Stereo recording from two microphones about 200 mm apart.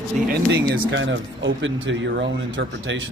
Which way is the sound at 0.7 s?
65° right (ahead or behind).